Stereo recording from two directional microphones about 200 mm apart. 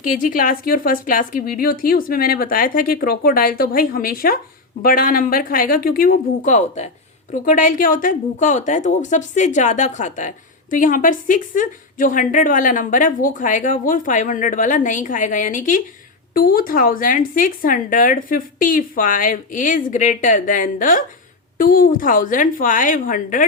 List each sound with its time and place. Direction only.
0.0 s a woman's voice: 40° left (ahead or behind)